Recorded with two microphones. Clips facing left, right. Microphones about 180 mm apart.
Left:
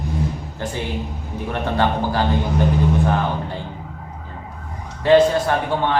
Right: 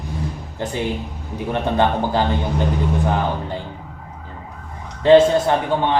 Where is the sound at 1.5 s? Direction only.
20° right (ahead or behind).